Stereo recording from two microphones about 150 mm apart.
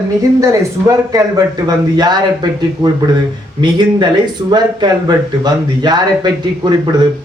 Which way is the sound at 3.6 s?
30° right (ahead or behind).